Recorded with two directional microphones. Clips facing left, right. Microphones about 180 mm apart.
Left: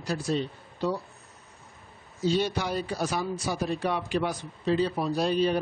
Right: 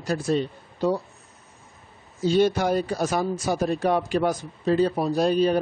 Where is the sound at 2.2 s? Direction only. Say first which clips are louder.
Right 6 dB; 50° right (ahead or behind).